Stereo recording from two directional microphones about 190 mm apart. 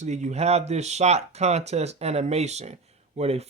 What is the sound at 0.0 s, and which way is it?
Speech, 40° right (ahead or behind).